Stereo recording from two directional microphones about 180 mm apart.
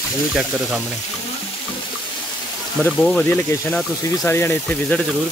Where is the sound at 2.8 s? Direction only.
5° left (ahead or behind).